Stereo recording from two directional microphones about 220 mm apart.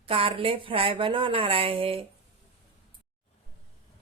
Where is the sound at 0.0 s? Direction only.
25° right (ahead or behind).